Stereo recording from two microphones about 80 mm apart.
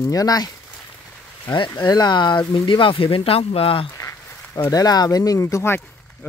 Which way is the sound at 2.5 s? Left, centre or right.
Left.